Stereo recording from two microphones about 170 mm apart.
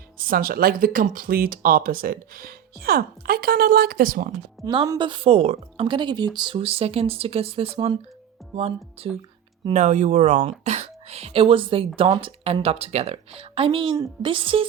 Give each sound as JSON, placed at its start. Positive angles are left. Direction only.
{"t": 0.3, "sound": "speech", "side_deg": -60}
{"t": 4.6, "sound": "a woman's voice", "side_deg": -25}